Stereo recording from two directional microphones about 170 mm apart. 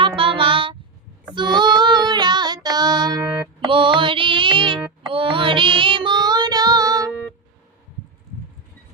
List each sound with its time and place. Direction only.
0.0 s child singing: 30° right (ahead or behind)
3.4 s music: 30° right (ahead or behind)
5.0 s child singing: 30° right (ahead or behind)